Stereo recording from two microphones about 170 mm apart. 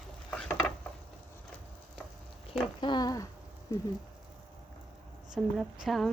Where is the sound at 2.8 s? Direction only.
25° left (ahead or behind).